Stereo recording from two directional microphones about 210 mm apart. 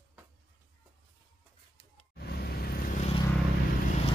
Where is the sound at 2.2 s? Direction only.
50° left (ahead or behind).